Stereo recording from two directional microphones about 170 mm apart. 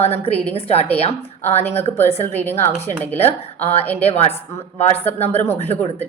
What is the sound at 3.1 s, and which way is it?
Speech, 35° left (ahead or behind).